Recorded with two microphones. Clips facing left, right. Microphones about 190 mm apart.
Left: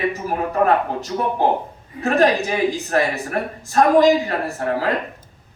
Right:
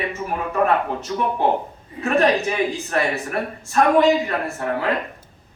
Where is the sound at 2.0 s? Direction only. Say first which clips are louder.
Left 1 dB; 35° left (ahead or behind).